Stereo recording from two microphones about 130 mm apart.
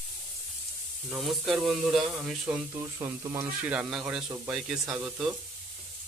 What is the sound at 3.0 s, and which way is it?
Speech, 25° right (ahead or behind).